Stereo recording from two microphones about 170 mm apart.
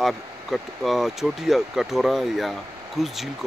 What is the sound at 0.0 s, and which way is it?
Speech, centre (ahead or behind).